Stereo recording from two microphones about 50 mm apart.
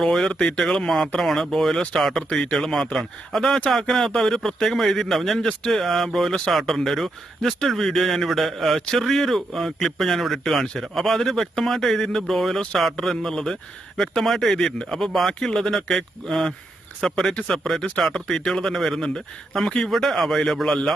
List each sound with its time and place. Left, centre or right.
0.0 s speech: centre
0.3 s speech: centre
0.6 s speech: centre